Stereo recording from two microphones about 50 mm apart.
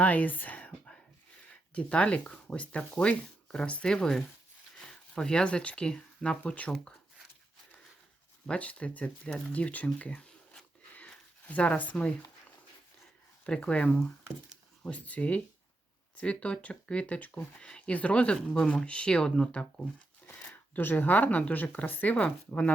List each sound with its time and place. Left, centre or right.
0.0 s speech: left; by 4.2 s centre
4.9 s a sound: centre
5.5 s speech: left
8.4 s speech: left
10.9 s a sound: left
13.7 s speech: left
20.5 s speech: left